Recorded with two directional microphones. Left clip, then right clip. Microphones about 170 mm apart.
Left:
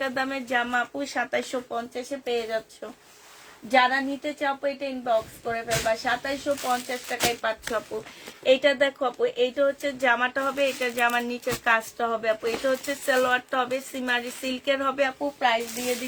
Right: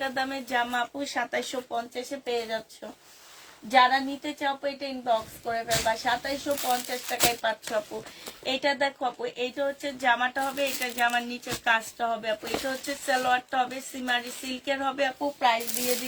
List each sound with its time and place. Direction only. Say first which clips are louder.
0.0 s speech: left 2 dB; 40° left (ahead or behind)
3.7 s speech: even; 35° left (ahead or behind)